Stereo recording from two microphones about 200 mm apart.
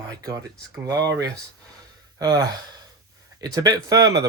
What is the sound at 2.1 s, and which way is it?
Speech, 20° right (ahead or behind).